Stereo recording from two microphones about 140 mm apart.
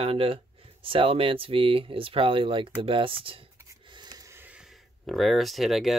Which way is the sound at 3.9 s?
30° right (ahead or behind).